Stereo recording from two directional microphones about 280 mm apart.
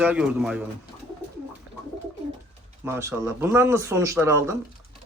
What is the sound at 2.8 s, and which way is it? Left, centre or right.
Speech, centre.